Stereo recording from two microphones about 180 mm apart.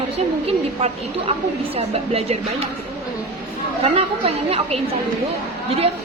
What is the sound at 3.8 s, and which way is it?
Speech, 35° right (ahead or behind).